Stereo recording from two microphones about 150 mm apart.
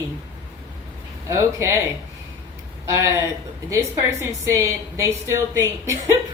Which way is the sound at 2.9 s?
20° right (ahead or behind).